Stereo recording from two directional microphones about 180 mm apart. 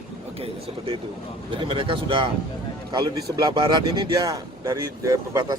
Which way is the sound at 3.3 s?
20° right (ahead or behind).